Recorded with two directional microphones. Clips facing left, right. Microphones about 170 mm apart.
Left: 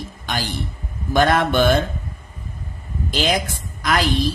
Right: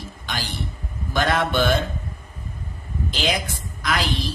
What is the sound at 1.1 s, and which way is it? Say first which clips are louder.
Speech: left 5 dB; 50° left (ahead or behind).